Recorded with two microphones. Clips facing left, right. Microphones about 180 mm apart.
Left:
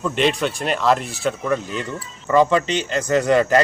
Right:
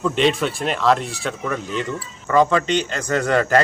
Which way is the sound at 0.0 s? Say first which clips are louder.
Right 1 dB; centre (ahead or behind).